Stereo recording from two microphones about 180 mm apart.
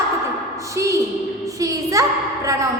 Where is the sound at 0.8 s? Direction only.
15° right (ahead or behind).